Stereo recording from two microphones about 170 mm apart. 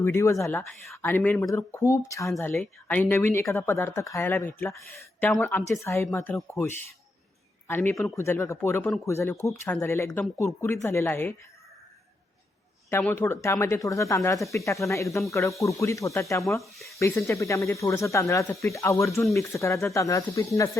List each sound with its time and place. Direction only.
0.0 s speech: 15° left (ahead or behind)
12.9 s speech: 10° left (ahead or behind)
16.7 s speech: centre (ahead or behind)
17.0 s speech: 15° left (ahead or behind)